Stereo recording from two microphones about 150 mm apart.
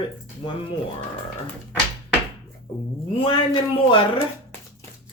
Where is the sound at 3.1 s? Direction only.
35° left (ahead or behind).